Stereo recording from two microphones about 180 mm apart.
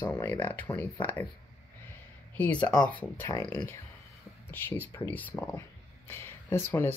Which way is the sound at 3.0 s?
15° left (ahead or behind).